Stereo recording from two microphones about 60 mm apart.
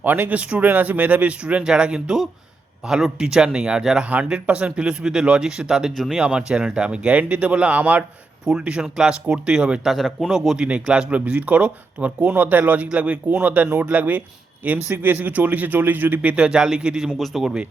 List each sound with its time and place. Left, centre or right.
0.0 s speech: right; by 9.8 s centre
9.8 s speech: centre; by 16.3 s right
16.3 s speech: centre
17.2 s speech: centre